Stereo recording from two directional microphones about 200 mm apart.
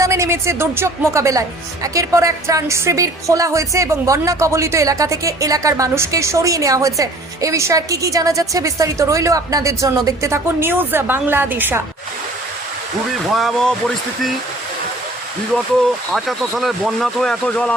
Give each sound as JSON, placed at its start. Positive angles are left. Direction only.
{"t": 0.0, "sound": "speech", "side_deg": -15}
{"t": 13.2, "sound": "speech", "side_deg": 0}
{"t": 16.1, "sound": "speech", "side_deg": 0}